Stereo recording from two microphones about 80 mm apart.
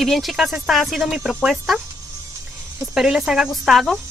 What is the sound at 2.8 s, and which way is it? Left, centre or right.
Speech, centre.